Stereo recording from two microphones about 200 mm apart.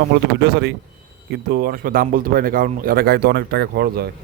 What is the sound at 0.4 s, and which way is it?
A man's voice, 50° right (ahead or behind).